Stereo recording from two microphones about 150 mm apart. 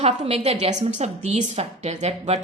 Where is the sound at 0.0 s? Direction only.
45° right (ahead or behind).